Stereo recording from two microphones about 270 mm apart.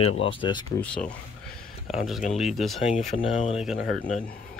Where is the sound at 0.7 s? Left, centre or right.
Centre.